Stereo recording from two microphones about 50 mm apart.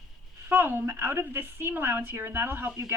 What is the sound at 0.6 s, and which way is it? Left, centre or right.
A woman's voice, right.